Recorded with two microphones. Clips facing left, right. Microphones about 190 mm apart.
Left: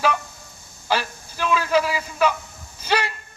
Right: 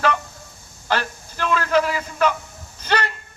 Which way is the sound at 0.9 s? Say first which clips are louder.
Even; 5° left (ahead or behind).